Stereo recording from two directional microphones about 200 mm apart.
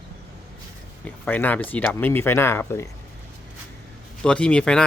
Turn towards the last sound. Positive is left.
turn(degrees=5)  # may be behind; listen again after turning